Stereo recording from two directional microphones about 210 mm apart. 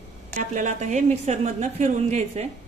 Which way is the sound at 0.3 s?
35° right (ahead or behind).